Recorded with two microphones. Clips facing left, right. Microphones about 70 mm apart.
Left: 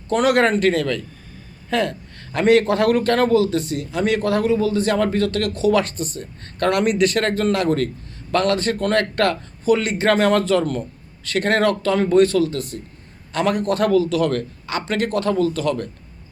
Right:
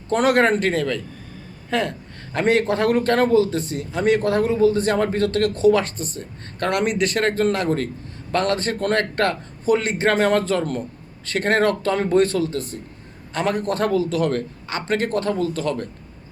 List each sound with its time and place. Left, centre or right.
0.1 s speech: right